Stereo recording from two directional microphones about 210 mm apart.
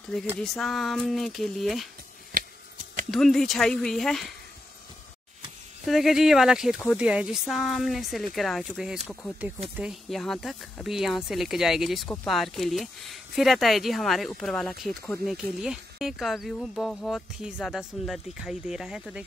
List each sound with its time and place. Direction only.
0.4 s speech: centre (ahead or behind)
3.1 s speech: centre (ahead or behind)
5.9 s speech: centre (ahead or behind)